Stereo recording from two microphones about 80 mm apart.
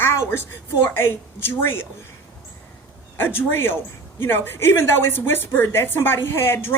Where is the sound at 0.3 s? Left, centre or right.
Left.